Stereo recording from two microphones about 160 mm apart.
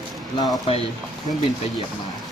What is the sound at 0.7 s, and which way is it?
Speech, 35° left (ahead or behind).